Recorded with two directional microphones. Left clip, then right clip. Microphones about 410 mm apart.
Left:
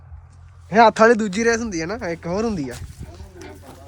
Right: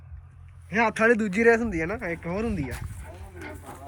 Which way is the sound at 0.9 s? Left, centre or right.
Centre.